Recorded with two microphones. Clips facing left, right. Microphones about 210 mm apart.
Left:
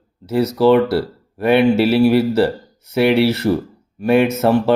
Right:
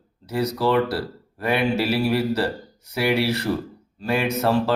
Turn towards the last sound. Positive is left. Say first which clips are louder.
# left 6 dB
turn(degrees=25)  # may be behind; listen again after turning